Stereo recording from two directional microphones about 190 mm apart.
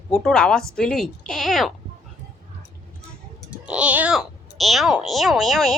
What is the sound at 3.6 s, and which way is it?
Speech, 5° right (ahead or behind).